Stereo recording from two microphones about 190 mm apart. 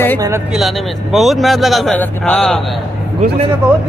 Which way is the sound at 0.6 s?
Centre (ahead or behind).